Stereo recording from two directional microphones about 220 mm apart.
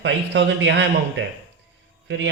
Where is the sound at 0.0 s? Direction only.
55° right (ahead or behind).